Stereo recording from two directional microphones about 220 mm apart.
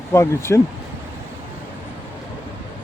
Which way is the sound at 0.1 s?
10° left (ahead or behind).